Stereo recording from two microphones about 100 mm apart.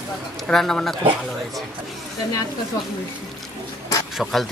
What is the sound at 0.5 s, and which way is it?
Speech, 5° left (ahead or behind).